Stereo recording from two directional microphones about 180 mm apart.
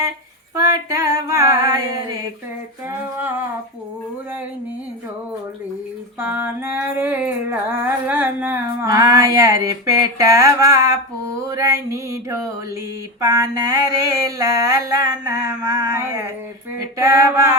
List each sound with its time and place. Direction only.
0.5 s female singing: 20° right (ahead or behind)
6.1 s female singing: 10° right (ahead or behind)
7.9 s a sound: 10° right (ahead or behind)
17.0 s male singing: 20° right (ahead or behind)